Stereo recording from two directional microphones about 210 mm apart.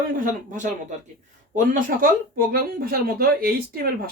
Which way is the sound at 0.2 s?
35° right (ahead or behind).